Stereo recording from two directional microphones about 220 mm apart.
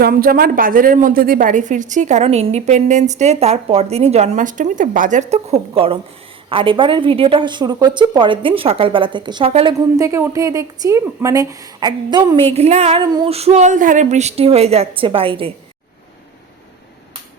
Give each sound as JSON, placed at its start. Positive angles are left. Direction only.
{"t": 0.0, "sound": "a woman's voice", "side_deg": -40}
{"t": 10.0, "sound": "a woman's voice", "side_deg": -15}